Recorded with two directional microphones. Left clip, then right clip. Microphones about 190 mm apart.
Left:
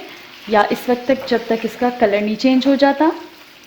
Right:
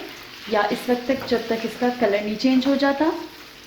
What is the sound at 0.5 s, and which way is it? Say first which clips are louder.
Frying: left 6 dB; 45° left (ahead or behind).